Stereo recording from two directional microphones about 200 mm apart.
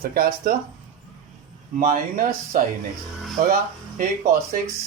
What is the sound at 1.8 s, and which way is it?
Speech, 40° right (ahead or behind).